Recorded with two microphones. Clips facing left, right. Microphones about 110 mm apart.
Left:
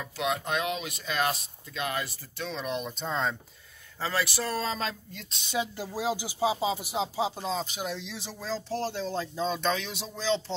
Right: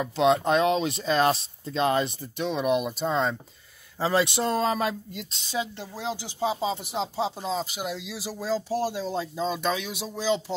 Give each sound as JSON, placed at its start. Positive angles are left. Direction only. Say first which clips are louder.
{"t": 0.0, "sound": "speech", "louder": "right 9 dB", "side_deg": -30}
{"t": 4.0, "sound": "speech", "louder": "right 6 dB", "side_deg": -20}
{"t": 5.3, "sound": "speech", "louder": "even", "side_deg": 0}